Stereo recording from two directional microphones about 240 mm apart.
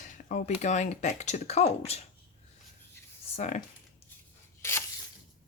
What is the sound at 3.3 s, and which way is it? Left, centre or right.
Speech, left.